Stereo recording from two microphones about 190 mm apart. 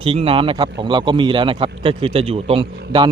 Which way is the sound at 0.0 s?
30° right (ahead or behind).